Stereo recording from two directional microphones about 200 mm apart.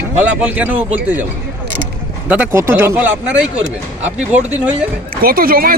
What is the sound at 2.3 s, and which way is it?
Speech, 5° right (ahead or behind).